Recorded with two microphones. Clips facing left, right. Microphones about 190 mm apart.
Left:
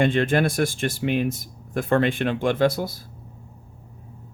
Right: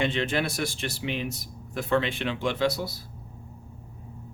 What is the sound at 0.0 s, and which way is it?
Speech, 50° left (ahead or behind).